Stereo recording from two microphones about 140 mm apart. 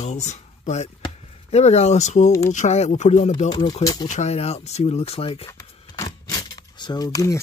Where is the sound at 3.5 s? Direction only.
30° left (ahead or behind).